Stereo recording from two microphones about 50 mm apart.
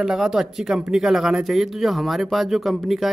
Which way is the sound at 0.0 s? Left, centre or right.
Centre.